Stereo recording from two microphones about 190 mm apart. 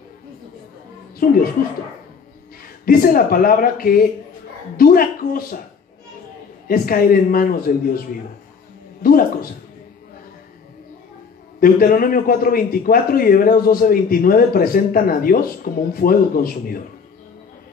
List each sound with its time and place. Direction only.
2.8 s speech: 50° left (ahead or behind)
6.7 s speech: 50° left (ahead or behind)
9.0 s speech: 50° left (ahead or behind)
11.6 s speech: 50° left (ahead or behind)